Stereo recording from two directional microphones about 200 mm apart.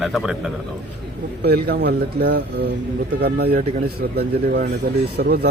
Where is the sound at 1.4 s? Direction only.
55° right (ahead or behind).